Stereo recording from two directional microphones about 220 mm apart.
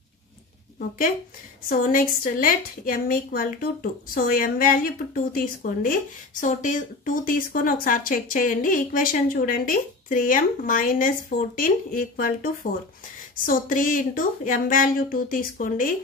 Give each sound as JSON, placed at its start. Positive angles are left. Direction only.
{"t": 0.7, "sound": "speech", "side_deg": 40}
{"t": 13.5, "sound": "speech", "side_deg": 40}